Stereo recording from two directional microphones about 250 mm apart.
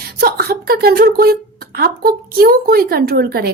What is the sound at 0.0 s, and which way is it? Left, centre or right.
A woman's voice, right.